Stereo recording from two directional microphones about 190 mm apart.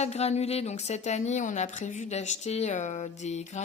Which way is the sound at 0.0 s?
35° left (ahead or behind).